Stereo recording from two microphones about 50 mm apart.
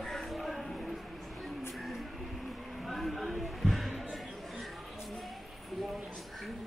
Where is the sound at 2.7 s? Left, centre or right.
Centre.